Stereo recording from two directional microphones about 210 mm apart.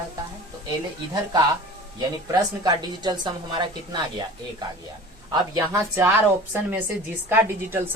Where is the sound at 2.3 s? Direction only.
20° right (ahead or behind).